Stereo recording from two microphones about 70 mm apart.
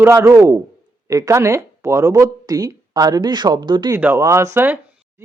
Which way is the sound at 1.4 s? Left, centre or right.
Right.